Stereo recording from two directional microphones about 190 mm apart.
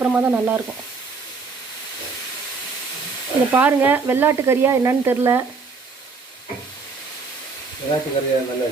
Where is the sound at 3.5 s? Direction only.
10° right (ahead or behind).